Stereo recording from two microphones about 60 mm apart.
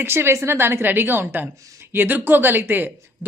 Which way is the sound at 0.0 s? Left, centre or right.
Right.